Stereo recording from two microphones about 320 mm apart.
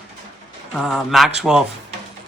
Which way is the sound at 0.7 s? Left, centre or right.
Centre.